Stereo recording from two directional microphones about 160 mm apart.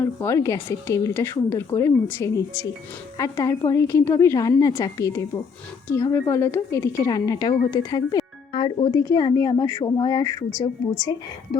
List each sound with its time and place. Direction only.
0.0 s a woman's voice: 15° left (ahead or behind)